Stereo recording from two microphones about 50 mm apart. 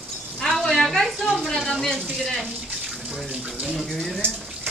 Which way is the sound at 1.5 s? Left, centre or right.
Centre.